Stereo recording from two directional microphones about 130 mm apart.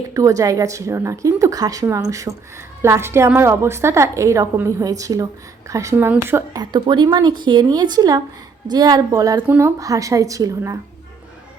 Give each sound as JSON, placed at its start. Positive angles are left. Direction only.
{"t": 0.1, "sound": "a woman's voice", "side_deg": -25}
{"t": 6.6, "sound": "a woman's voice", "side_deg": -35}